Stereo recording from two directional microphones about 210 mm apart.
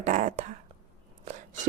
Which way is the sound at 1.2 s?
35° right (ahead or behind).